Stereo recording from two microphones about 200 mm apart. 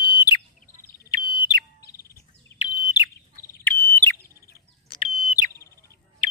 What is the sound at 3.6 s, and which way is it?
Bird, 10° left (ahead or behind).